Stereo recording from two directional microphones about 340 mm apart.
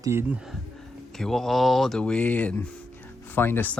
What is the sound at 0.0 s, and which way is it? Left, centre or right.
Speech, centre.